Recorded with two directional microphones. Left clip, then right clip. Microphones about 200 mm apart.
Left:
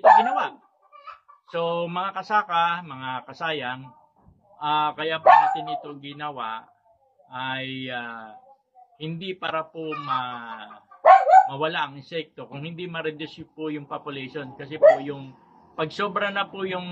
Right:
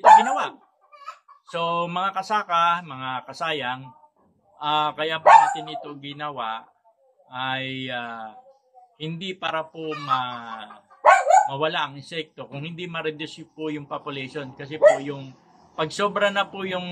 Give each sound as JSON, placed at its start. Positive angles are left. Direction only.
{"t": 0.2, "sound": "dog", "side_deg": -20}
{"t": 1.5, "sound": "speech", "side_deg": -20}